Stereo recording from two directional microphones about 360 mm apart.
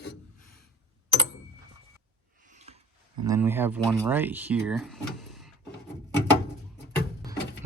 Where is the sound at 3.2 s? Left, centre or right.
Centre.